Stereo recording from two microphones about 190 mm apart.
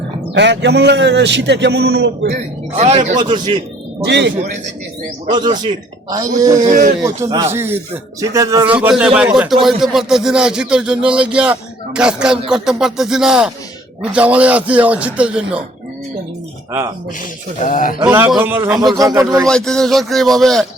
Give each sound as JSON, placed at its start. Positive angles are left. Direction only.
{"t": 0.3, "sound": "a man's voice", "side_deg": -65}
{"t": 2.7, "sound": "a man's voice", "side_deg": -35}
{"t": 3.2, "sound": "a man's voice", "side_deg": -25}
{"t": 4.0, "sound": "a man's voice", "side_deg": -65}
{"t": 5.3, "sound": "a man's voice", "side_deg": -25}
{"t": 6.7, "sound": "speech", "side_deg": -45}
{"t": 7.0, "sound": "a man's voice", "side_deg": -15}
{"t": 17.7, "sound": "speech", "side_deg": 45}
{"t": 18.0, "sound": "a man's voice", "side_deg": -10}
{"t": 19.5, "sound": "speech", "side_deg": 5}